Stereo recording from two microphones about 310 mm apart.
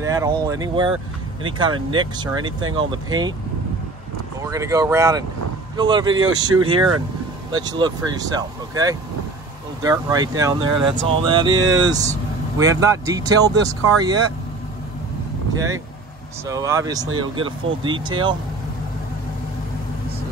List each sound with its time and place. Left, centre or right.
0.0 s speech: centre
4.5 s speech: centre
16.4 s speech: centre